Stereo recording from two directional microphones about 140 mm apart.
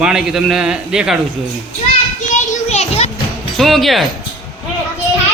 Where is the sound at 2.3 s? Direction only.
55° left (ahead or behind).